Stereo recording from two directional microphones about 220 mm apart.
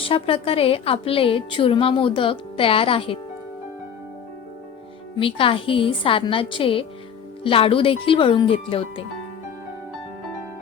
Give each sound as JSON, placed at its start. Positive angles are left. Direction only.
{"t": 0.0, "sound": "a woman's voice", "side_deg": 25}
{"t": 5.1, "sound": "a woman's voice", "side_deg": 25}